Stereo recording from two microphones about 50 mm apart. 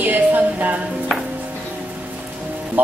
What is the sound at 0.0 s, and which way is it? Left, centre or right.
Music, right.